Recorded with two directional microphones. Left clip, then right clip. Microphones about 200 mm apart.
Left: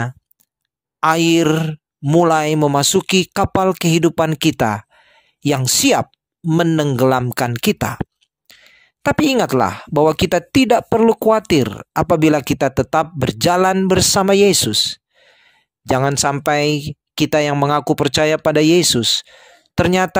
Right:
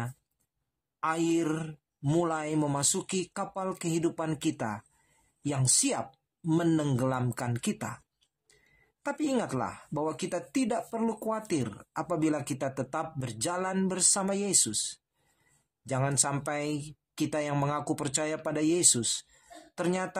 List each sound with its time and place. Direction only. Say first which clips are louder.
0.9 s speech: left 15 dB; 50° left (ahead or behind)
9.0 s speech: left 16 dB; 50° left (ahead or behind)